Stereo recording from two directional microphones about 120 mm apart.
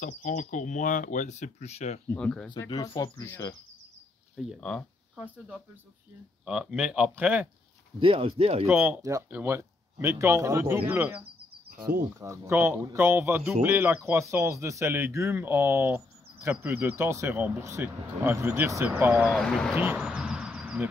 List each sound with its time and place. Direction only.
0.0 s speech: 90° left; by 2.0 s 60° left (ahead or behind)
2.1 s speech: 10° left (ahead or behind)
2.7 s speech: 35° left (ahead or behind)
4.6 s speech: 5° left (ahead or behind)
5.1 s speech: 10° right (ahead or behind)
8.0 s speech: 50° right (ahead or behind)
8.8 s speech: 25° right (ahead or behind)
11.8 s speech: 25° right (ahead or behind)
19.3 s speech: 5° left (ahead or behind)
19.7 s a sound: 10° right (ahead or behind)